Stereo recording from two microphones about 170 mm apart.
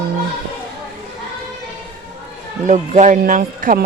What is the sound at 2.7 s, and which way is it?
Speech, 45° right (ahead or behind).